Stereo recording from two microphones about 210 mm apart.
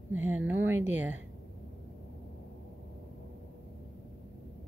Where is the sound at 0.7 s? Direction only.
75° right (ahead or behind).